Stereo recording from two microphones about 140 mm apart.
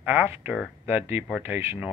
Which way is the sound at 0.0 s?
15° right (ahead or behind).